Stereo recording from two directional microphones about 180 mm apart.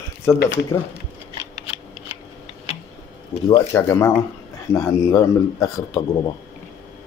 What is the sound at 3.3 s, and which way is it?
Speech, 25° left (ahead or behind).